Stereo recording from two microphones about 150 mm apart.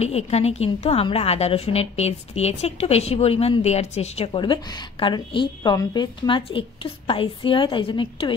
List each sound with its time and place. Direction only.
0.0 s a woman's voice: 45° left (ahead or behind)